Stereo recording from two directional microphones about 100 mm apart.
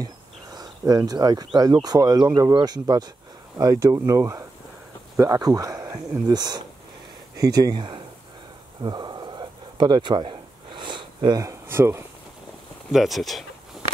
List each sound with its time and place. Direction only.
0.0 s speech: 40° right (ahead or behind)
8.8 s a sound: 45° right (ahead or behind)
11.4 s speech: 25° right (ahead or behind)
12.9 s speech: centre (ahead or behind)